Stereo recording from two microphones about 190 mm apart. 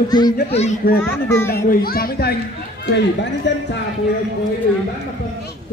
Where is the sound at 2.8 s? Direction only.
65° left (ahead or behind).